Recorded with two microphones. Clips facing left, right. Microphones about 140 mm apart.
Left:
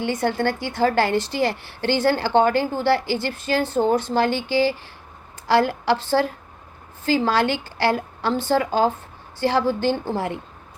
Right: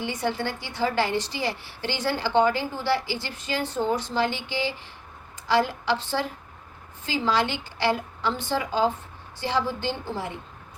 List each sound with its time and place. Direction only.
0.0 s a woman's voice: 50° left (ahead or behind)